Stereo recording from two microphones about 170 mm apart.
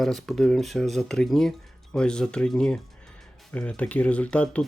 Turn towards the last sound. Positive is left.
turn(degrees=5)  # may be behind; listen again after turning